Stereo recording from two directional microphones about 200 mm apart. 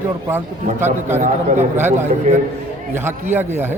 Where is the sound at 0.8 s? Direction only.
10° right (ahead or behind).